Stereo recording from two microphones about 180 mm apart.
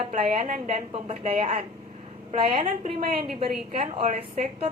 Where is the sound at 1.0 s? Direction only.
35° right (ahead or behind).